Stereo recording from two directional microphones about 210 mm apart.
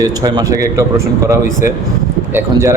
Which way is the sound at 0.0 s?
20° right (ahead or behind).